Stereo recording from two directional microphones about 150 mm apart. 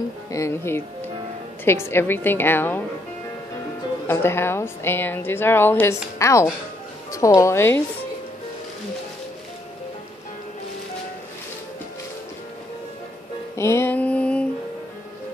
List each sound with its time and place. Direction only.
0.3 s speech: 20° left (ahead or behind)
4.1 s a woman's voice: 15° left (ahead or behind)
13.6 s a sound: 20° left (ahead or behind)